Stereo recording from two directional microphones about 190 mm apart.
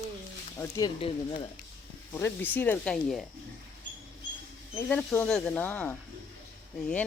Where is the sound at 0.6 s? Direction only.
20° left (ahead or behind).